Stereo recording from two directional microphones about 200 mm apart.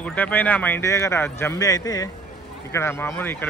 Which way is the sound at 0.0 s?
10° left (ahead or behind).